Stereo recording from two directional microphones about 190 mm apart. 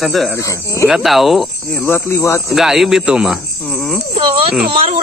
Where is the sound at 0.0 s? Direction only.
Centre (ahead or behind).